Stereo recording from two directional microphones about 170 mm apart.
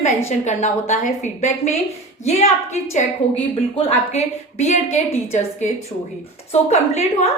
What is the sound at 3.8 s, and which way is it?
A woman's voice, 40° left (ahead or behind).